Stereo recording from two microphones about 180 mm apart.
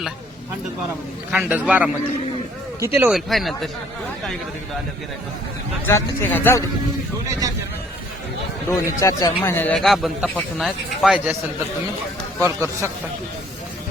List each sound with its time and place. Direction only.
1.3 s a man's voice: 5° right (ahead or behind)
3.1 s speech: centre (ahead or behind)
5.8 s speech: 10° left (ahead or behind)
7.3 s speech: 20° right (ahead or behind)
9.0 s speech: 15° left (ahead or behind); by 11.3 s centre (ahead or behind)
12.4 s a man's voice: 15° right (ahead or behind)